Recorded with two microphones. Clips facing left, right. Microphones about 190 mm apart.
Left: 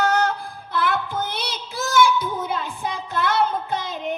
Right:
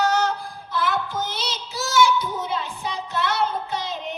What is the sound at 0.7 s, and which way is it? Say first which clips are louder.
Speech: left 1 dB; 55° left (ahead or behind).